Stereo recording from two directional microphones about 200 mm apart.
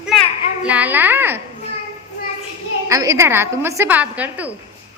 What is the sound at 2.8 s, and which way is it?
A woman's voice, 15° right (ahead or behind).